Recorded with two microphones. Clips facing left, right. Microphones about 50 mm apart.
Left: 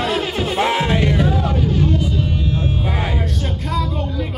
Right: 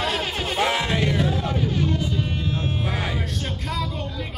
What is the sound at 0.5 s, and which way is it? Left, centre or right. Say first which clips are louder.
Music: left 4 dB; left.